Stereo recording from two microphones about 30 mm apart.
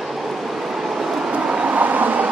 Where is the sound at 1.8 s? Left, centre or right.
Right.